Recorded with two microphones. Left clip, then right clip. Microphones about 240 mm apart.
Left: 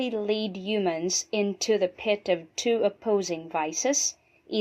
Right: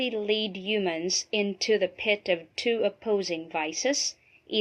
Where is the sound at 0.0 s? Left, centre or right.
Left.